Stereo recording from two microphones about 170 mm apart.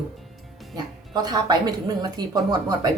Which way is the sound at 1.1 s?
25° right (ahead or behind).